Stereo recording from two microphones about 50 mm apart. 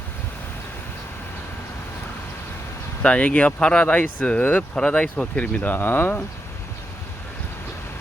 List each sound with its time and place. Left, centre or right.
3.0 s speech: left
4.7 s speech: left
5.4 s speech: left